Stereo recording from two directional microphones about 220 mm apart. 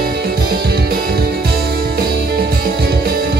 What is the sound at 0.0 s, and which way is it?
Music, 45° right (ahead or behind).